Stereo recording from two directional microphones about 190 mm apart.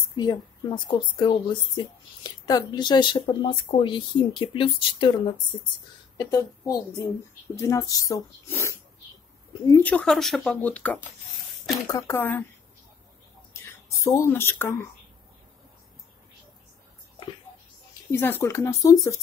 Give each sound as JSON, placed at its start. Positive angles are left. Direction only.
{"t": 0.1, "sound": "speech", "side_deg": 20}
{"t": 13.5, "sound": "a sound", "side_deg": 15}
{"t": 18.1, "sound": "speech", "side_deg": 10}